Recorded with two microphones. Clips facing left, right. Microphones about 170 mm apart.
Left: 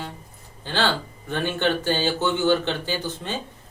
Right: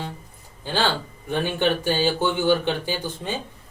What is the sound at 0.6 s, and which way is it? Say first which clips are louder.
Speech: even; 10° right (ahead or behind).